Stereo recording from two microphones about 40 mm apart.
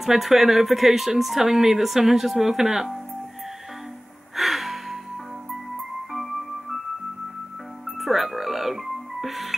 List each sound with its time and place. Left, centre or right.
0.0 s speech: centre
4.4 s music: centre
6.1 s music: centre
7.8 s music: centre